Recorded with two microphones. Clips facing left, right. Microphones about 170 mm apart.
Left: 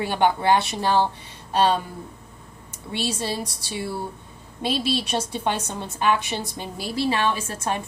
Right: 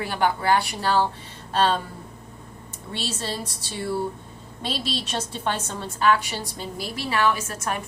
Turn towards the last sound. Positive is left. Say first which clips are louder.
# left 1 dB
turn(degrees=30)  # may be behind; listen again after turning